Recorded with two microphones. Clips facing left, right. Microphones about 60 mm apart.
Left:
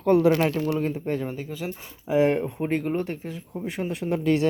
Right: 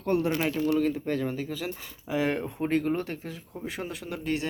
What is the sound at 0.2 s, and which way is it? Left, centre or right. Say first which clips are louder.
Speech: left 8 dB; left.